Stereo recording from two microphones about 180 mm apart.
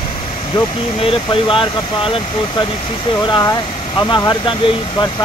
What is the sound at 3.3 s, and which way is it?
Speech, 20° left (ahead or behind).